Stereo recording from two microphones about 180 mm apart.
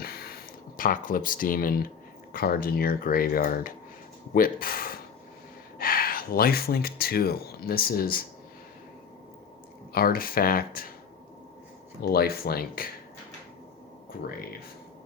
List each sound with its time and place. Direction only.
0.0 s a sound: 55° left (ahead or behind)
2.3 s speech: 55° left (ahead or behind)
9.9 s speech: 55° left (ahead or behind)
12.0 s speech: 60° left (ahead or behind)